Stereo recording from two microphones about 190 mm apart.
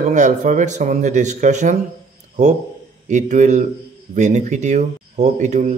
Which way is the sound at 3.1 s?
40° right (ahead or behind).